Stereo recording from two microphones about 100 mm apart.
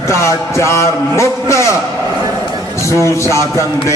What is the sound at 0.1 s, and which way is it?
A man's voice, 30° left (ahead or behind).